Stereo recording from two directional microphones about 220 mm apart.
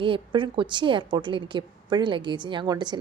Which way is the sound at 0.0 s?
25° right (ahead or behind).